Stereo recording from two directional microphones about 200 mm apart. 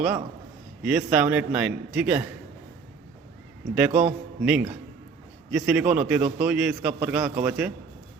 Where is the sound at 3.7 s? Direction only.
5° right (ahead or behind).